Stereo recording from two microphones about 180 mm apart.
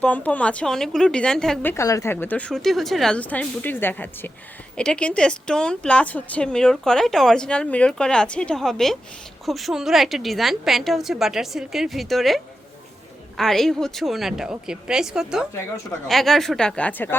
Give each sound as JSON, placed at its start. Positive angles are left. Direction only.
{"t": 0.0, "sound": "a woman's voice", "side_deg": 10}
{"t": 1.7, "sound": "a woman's voice", "side_deg": 15}